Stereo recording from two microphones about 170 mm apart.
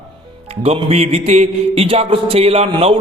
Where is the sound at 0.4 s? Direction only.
35° right (ahead or behind).